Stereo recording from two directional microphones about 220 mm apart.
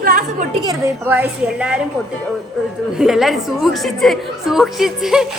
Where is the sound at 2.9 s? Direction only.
Centre (ahead or behind).